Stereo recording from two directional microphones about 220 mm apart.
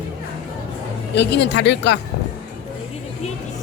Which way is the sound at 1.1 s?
50° left (ahead or behind).